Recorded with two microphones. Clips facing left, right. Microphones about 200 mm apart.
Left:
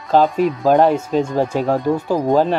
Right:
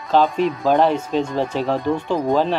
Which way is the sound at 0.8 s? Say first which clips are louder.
Left 3 dB; 10° left (ahead or behind).